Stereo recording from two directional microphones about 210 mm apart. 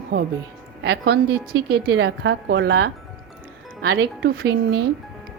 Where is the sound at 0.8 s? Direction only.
55° right (ahead or behind).